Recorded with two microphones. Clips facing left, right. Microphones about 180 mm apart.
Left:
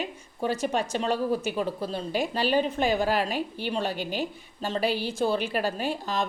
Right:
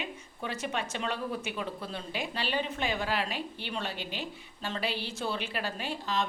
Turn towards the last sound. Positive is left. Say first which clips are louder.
# left 4 dB
turn(degrees=45)  # may be behind; listen again after turning